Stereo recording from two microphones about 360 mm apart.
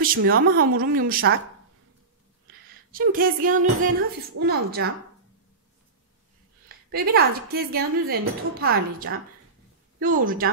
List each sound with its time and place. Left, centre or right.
0.0 s a woman's voice: right
2.9 s a woman's voice: right
6.9 s a woman's voice: right